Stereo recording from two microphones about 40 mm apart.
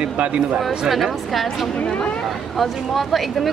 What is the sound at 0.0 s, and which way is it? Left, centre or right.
Speech, right.